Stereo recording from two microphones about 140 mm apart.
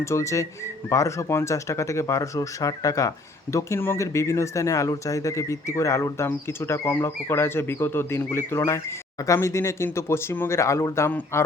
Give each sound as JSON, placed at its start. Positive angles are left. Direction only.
{"t": 0.0, "sound": "speech", "side_deg": 20}